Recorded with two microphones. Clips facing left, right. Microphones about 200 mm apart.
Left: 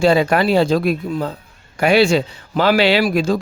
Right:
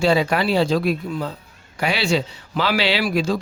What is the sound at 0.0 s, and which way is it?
A man's voice, 50° left (ahead or behind).